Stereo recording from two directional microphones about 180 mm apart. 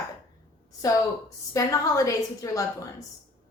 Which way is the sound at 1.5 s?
20° left (ahead or behind).